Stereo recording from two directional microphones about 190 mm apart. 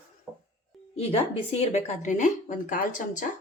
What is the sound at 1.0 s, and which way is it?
Speech, 30° left (ahead or behind).